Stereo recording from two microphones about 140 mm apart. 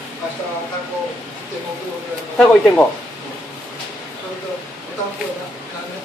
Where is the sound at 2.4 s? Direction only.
10° left (ahead or behind).